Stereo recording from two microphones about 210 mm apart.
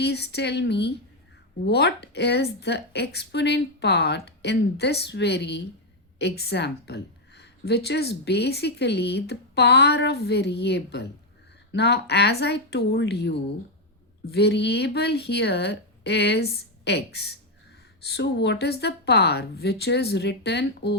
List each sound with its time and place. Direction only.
0.0 s a woman's voice: 50° left (ahead or behind)